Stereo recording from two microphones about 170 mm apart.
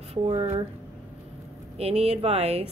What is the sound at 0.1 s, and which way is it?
Speech, 35° right (ahead or behind).